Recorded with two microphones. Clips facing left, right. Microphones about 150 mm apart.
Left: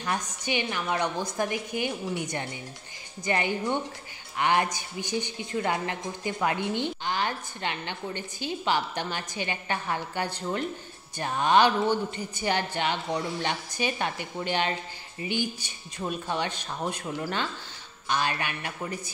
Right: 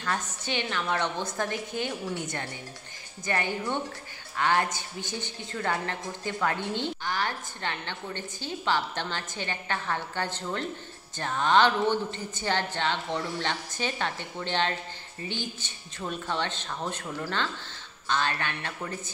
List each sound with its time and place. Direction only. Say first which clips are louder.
0.0 s a woman's voice: left 1 dB; 15° left (ahead or behind)
3.3 s a woman's voice: left 2 dB; 15° left (ahead or behind)